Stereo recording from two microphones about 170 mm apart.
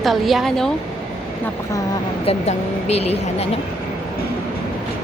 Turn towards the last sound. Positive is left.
turn(degrees=40)  # may be behind; listen again after turning